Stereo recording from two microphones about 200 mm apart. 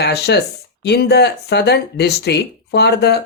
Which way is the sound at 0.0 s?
55° left (ahead or behind).